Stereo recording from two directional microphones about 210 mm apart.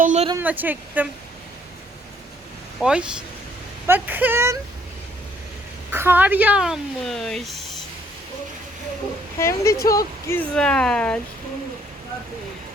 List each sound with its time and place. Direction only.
0.0 s a sound: 35° right (ahead or behind)
0.3 s speech: 10° right (ahead or behind)
2.8 s a woman's voice: 5° right (ahead or behind)
5.9 s a woman's voice: 10° right (ahead or behind)
9.4 s a woman's voice: 15° left (ahead or behind)